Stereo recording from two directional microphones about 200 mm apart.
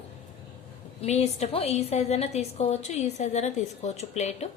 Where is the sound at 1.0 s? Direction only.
30° left (ahead or behind).